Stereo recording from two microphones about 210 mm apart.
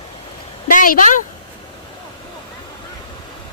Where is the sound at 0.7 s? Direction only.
40° left (ahead or behind).